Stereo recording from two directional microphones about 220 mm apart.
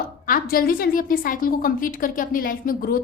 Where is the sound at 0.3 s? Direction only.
40° left (ahead or behind).